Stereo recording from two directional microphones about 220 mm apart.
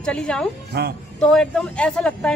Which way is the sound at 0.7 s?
50° right (ahead or behind).